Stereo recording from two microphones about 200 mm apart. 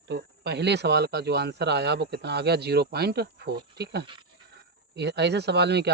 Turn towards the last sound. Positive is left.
turn(degrees=-55)  # may be behind; listen again after turning